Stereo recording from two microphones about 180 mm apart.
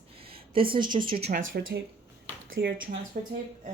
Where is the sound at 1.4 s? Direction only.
80° right.